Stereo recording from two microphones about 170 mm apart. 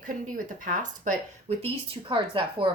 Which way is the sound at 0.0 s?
50° right (ahead or behind).